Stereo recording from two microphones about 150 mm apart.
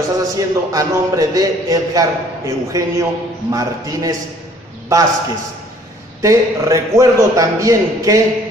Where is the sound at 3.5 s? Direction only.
25° right (ahead or behind).